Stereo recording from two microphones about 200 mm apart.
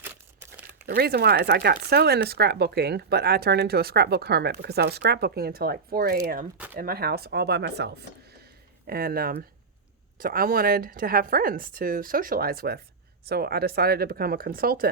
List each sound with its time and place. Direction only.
0.0 s crumpling: 10° right (ahead or behind)
0.9 s speech: 50° right (ahead or behind)